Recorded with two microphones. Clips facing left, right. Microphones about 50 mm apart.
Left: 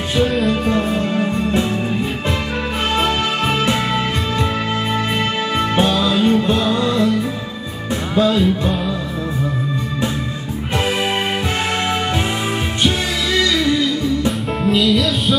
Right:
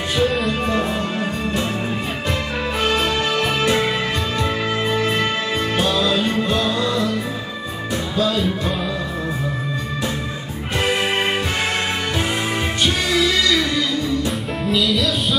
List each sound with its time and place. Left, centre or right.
2.9 s music: left
5.8 s music: left
8.2 s music: left
14.6 s music: centre